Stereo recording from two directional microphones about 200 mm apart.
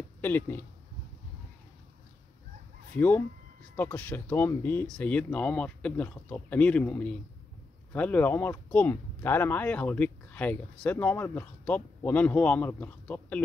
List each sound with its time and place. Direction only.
0.2 s speech: 10° left (ahead or behind)
3.0 s speech: 10° left (ahead or behind)